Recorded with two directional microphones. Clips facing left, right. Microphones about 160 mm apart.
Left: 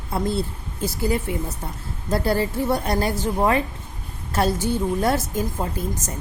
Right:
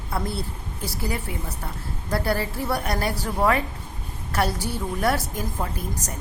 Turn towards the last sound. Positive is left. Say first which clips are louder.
# left 3 dB
turn(degrees=25)  # may be behind; listen again after turning